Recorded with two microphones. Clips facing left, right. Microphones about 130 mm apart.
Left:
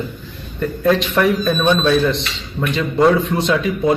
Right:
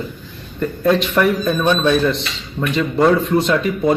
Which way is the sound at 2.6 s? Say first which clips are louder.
Even; centre (ahead or behind).